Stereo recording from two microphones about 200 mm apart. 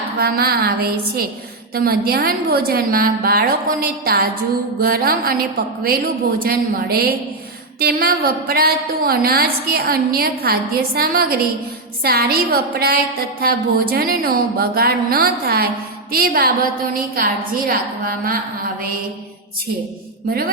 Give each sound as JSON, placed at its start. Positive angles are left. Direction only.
{"t": 0.2, "sound": "a woman's voice", "side_deg": -50}